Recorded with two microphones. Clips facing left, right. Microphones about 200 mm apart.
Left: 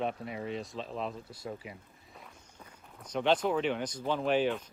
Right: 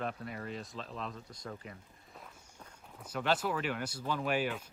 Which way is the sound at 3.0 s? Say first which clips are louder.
Left 5 dB; 5° right (ahead or behind).